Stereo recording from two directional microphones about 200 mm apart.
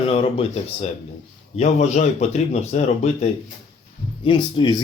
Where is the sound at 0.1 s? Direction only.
30° left (ahead or behind).